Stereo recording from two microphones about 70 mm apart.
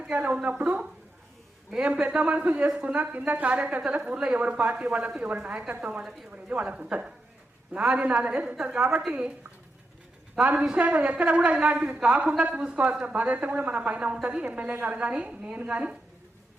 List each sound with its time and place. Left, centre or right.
0.1 s a woman's voice: right
10.4 s a woman's voice: centre